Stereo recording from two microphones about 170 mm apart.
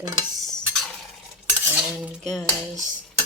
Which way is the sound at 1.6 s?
10° right (ahead or behind).